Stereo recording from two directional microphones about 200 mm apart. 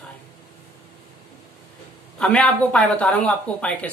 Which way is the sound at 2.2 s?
5° left (ahead or behind).